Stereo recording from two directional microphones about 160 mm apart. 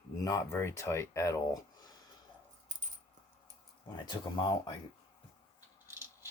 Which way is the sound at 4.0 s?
25° left (ahead or behind).